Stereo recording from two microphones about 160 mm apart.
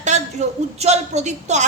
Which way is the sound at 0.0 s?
45° right (ahead or behind).